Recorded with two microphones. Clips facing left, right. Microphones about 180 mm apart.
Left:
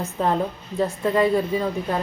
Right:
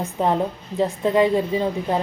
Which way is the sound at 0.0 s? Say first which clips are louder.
Right 2 dB; 15° right (ahead or behind).